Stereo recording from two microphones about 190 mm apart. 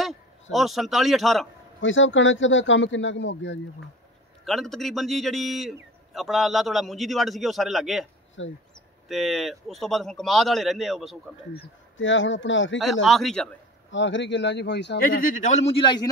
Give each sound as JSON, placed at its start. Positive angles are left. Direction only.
{"t": 0.0, "sound": "a man's voice", "side_deg": 0}
{"t": 1.8, "sound": "a man's voice", "side_deg": 80}
{"t": 4.5, "sound": "a man's voice", "side_deg": 0}
{"t": 8.4, "sound": "a man's voice", "side_deg": 90}
{"t": 9.1, "sound": "a man's voice", "side_deg": 0}
{"t": 12.0, "sound": "a man's voice", "side_deg": 80}
{"t": 13.0, "sound": "a man's voice", "side_deg": 0}
{"t": 13.8, "sound": "speech", "side_deg": 75}
{"t": 15.0, "sound": "a man's voice", "side_deg": 45}